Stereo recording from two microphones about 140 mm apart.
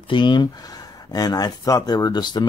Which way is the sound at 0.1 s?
35° left (ahead or behind).